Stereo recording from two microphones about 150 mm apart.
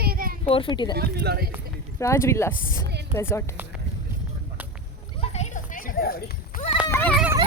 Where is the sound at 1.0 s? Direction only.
90° right.